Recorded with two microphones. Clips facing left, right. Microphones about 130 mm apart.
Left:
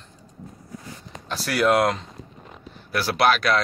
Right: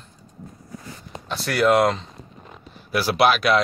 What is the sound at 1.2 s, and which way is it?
Speech, centre (ahead or behind).